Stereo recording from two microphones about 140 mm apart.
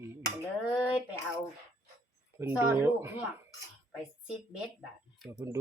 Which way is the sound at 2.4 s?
10° right (ahead or behind).